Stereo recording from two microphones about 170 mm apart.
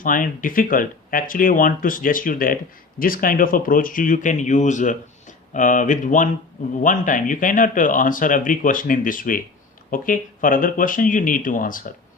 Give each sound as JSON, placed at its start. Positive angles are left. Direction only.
{"t": 0.0, "sound": "speech", "side_deg": 55}